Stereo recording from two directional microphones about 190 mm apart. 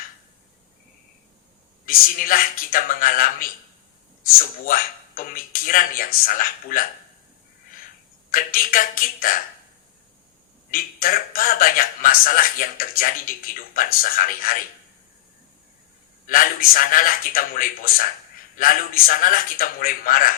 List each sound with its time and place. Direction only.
1.9 s a man's voice: 45° left (ahead or behind)
8.3 s a man's voice: 50° left (ahead or behind)
10.7 s a man's voice: 50° left (ahead or behind)
16.2 s a man's voice: 45° left (ahead or behind)